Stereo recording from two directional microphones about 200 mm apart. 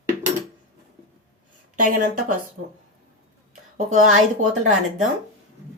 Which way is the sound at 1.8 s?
45° right (ahead or behind).